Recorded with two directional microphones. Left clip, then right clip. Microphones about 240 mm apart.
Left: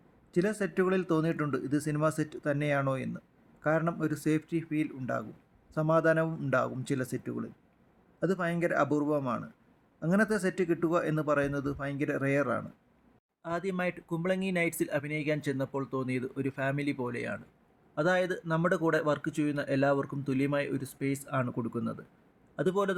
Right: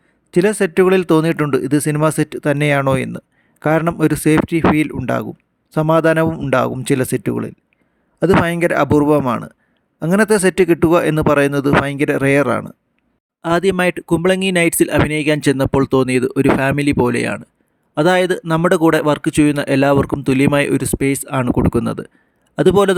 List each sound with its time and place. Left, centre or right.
0.3 s speech: right